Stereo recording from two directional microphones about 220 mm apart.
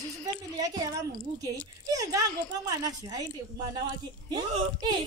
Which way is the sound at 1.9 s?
15° right (ahead or behind).